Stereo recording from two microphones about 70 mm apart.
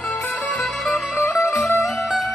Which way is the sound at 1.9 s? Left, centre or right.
Centre.